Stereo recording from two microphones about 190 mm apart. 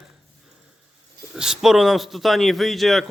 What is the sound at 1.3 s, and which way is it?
Speech, 5° right (ahead or behind).